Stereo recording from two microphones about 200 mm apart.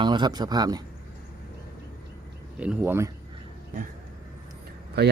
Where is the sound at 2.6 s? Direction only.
5° right (ahead or behind).